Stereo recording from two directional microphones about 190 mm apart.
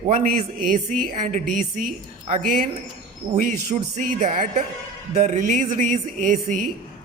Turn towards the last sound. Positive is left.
turn(degrees=-40)  # may be behind; listen again after turning